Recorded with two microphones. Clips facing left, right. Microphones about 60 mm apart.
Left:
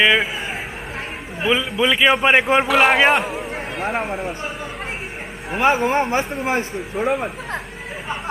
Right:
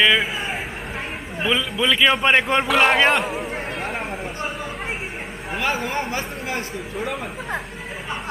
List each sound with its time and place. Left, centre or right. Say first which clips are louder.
0.0 s speech: left 2 dB; centre
1.4 s a man's voice: left 3 dB; centre
3.8 s speech: left 4 dB; centre
5.6 s speech: left 8 dB; left